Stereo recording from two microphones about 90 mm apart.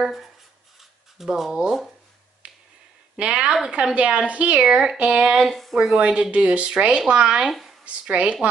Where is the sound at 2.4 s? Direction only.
15° right (ahead or behind).